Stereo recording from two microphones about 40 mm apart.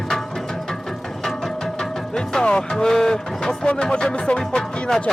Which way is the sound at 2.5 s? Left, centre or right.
Left.